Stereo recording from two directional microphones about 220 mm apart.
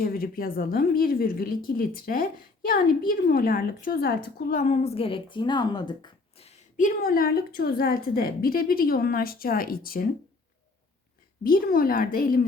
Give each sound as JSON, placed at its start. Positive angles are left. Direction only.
{"t": 0.0, "sound": "a woman's voice", "side_deg": 40}
{"t": 11.4, "sound": "a woman's voice", "side_deg": 40}